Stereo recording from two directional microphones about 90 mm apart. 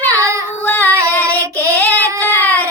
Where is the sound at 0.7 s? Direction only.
20° left (ahead or behind).